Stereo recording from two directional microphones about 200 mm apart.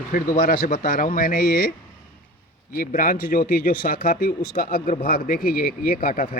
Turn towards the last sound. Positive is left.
turn(degrees=45)  # may be behind; listen again after turning